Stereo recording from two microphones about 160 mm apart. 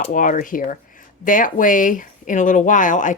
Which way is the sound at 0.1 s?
55° left (ahead or behind).